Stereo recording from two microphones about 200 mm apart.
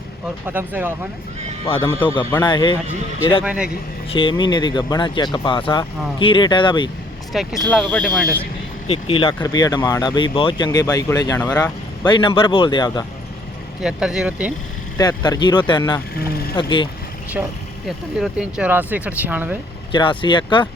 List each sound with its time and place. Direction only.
0.4 s speech: 10° right (ahead or behind)
1.6 s speech: 25° left (ahead or behind)
3.4 s speech: 5° right (ahead or behind)
4.1 s speech: 25° left (ahead or behind)
7.3 s speech: centre (ahead or behind)
8.9 s speech: 25° left (ahead or behind)
13.8 s speech: 5° right (ahead or behind)
14.9 s speech: 20° left (ahead or behind)
16.1 s speech: 50° left (ahead or behind)
16.6 s speech: 25° left (ahead or behind)
17.4 s speech: 5° right (ahead or behind)
19.9 s speech: 25° left (ahead or behind)